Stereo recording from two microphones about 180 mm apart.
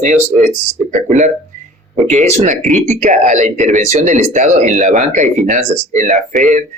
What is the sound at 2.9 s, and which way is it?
A man's voice, 45° right (ahead or behind).